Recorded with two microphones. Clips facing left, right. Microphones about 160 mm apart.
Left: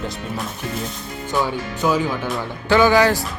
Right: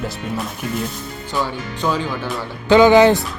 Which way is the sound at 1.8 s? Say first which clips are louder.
Left 1 dB; 5° left (ahead or behind).